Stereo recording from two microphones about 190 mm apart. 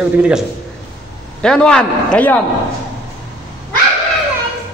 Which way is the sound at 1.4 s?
5° left (ahead or behind).